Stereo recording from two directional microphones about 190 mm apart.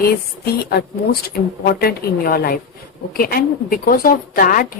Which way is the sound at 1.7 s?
55° left (ahead or behind).